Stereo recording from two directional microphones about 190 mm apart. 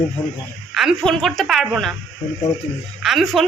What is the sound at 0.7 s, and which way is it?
Speech, centre (ahead or behind).